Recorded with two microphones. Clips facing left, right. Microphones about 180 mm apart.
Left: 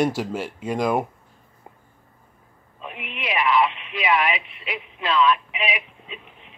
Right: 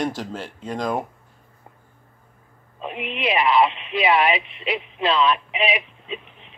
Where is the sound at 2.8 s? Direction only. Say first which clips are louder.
Right 7 dB; 30° right (ahead or behind).